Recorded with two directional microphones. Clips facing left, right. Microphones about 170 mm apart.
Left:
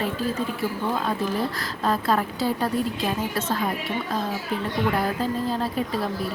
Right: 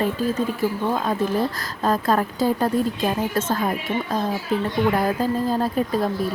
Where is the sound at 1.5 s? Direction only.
45° right (ahead or behind).